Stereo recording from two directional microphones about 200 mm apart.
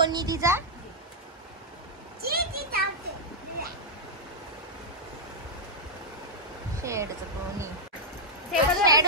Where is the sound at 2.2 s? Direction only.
50° right (ahead or behind).